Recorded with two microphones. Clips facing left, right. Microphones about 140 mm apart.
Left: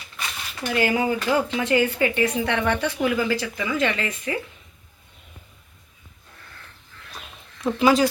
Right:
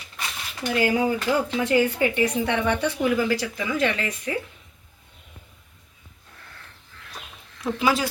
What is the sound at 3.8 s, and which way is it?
Speech, 90° left.